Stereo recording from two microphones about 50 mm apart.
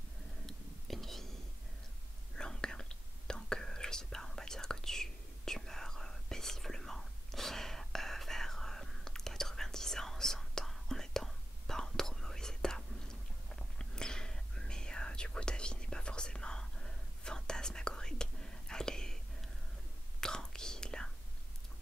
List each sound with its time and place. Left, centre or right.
0.5 s whispering: centre
2.3 s whispering: centre
20.2 s whispering: centre